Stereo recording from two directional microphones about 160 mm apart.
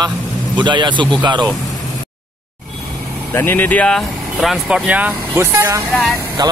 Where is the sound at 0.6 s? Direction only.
30° right (ahead or behind).